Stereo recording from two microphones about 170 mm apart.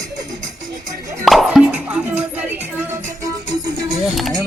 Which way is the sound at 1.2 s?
Centre (ahead or behind).